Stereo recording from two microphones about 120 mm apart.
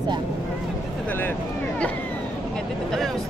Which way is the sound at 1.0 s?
15° left (ahead or behind).